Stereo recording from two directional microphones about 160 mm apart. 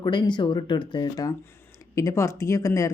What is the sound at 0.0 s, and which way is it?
Speech, 30° left (ahead or behind).